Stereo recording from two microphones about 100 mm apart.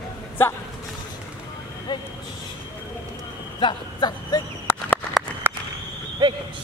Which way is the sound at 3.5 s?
50° left (ahead or behind).